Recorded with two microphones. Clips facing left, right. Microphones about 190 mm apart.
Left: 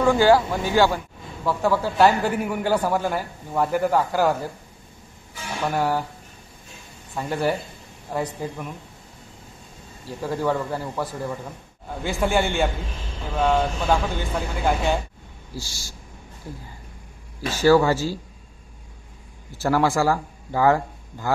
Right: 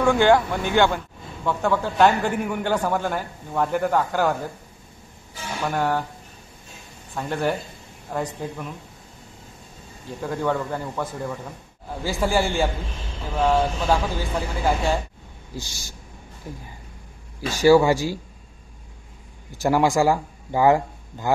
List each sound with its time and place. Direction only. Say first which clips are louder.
0.0 s speech: left 1 dB; 5° left (ahead or behind)
5.7 s speech: even; 5° left (ahead or behind)
7.2 s speech: left 1 dB; 5° left (ahead or behind)
10.0 s speech: left 1 dB; 5° left (ahead or behind)
15.5 s speech: even; 20° right (ahead or behind)
19.5 s a man's voice: right 1 dB; 15° right (ahead or behind)